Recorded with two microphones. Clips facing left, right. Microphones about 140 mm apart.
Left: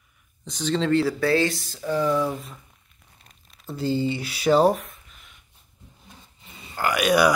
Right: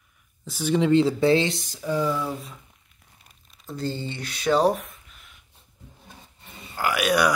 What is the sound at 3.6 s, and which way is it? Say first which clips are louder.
Speech: left 6 dB; 5° left (ahead or behind).